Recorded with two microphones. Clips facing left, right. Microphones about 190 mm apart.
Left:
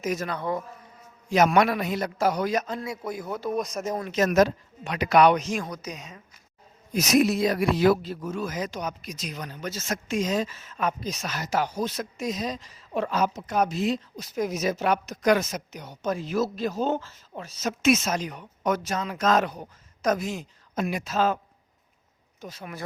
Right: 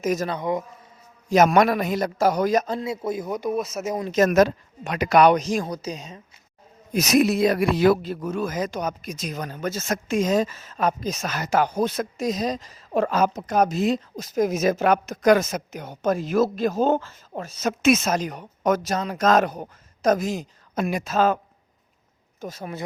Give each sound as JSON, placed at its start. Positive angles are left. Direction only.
{"t": 0.0, "sound": "a woman's voice", "side_deg": -45}
{"t": 0.3, "sound": "speech", "side_deg": -15}
{"t": 1.3, "sound": "a man's voice", "side_deg": -45}
{"t": 3.5, "sound": "speech", "side_deg": -5}
{"t": 4.1, "sound": "a woman's voice", "side_deg": -50}
{"t": 6.9, "sound": "a woman's voice", "side_deg": -65}
{"t": 12.1, "sound": "a woman's voice", "side_deg": -40}
{"t": 22.4, "sound": "speech", "side_deg": -45}